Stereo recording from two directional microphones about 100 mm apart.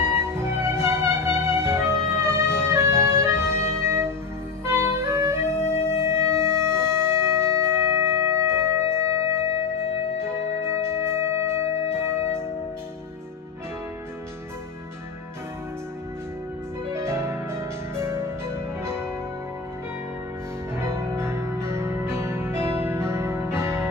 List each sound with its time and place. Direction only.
0.3 s music: 25° right (ahead or behind)
10.6 s music: 25° right (ahead or behind)
16.9 s music: 25° right (ahead or behind)
20.8 s music: 25° right (ahead or behind)